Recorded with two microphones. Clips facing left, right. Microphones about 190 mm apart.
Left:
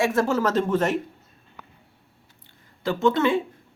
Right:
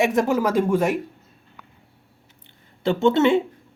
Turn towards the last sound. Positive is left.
turn(degrees=-25)  # may be behind; listen again after turning